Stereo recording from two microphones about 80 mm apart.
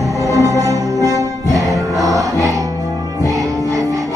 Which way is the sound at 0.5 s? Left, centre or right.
Right.